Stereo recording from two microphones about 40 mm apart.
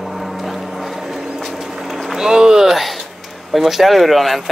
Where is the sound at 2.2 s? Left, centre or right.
Centre.